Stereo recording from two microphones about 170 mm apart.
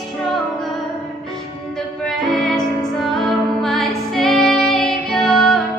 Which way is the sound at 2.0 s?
5° left (ahead or behind).